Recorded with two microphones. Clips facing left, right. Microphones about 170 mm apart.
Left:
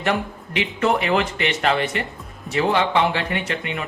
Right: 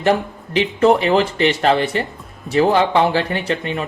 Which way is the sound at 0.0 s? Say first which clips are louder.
Right 6 dB; 35° right (ahead or behind).